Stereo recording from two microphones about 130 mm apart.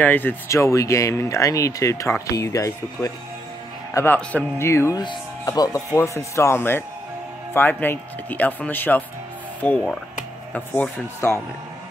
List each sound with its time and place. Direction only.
0.0 s speech: 15° left (ahead or behind)